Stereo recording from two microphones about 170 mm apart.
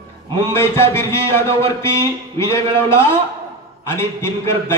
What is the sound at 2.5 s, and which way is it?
A man's voice, 15° left (ahead or behind).